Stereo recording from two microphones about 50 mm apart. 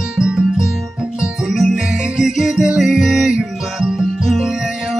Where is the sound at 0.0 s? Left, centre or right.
Centre.